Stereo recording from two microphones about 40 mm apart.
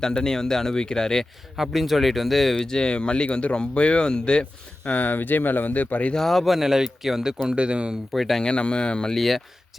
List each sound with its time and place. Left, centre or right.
0.0 s speech: centre
1.5 s speech: centre
2.6 s speech: centre
4.9 s speech: left
6.1 s speech: centre
6.6 s speech: centre
7.5 s speech: right
8.1 s speech: centre
8.4 s speech: left
9.1 s speech: centre